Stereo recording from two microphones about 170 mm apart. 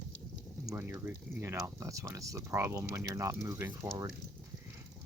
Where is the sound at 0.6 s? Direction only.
20° right (ahead or behind).